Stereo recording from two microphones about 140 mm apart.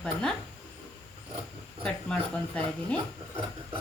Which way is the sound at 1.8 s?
5° left (ahead or behind).